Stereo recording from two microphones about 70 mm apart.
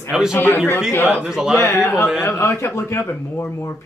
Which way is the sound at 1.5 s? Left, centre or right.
Left.